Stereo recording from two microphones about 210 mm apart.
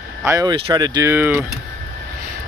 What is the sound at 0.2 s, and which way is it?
Speech, 15° right (ahead or behind).